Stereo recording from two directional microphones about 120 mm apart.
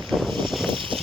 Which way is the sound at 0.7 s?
45° right (ahead or behind).